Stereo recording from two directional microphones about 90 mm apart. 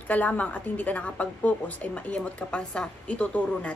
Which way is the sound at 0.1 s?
15° left (ahead or behind).